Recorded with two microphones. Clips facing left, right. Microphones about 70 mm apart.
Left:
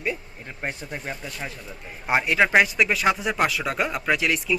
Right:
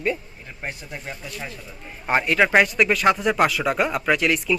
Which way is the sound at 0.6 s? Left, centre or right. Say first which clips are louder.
Left 2 dB; left.